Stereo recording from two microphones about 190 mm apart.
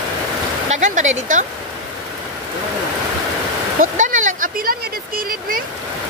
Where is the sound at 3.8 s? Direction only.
40° right (ahead or behind).